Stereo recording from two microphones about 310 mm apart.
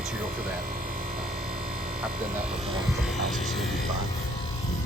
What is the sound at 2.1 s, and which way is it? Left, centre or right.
Speech, right.